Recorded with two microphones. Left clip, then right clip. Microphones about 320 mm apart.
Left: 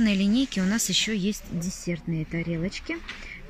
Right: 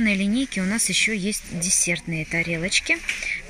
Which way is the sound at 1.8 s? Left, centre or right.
Right.